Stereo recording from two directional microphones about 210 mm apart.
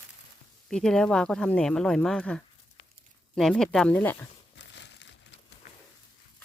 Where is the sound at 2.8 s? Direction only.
30° left (ahead or behind).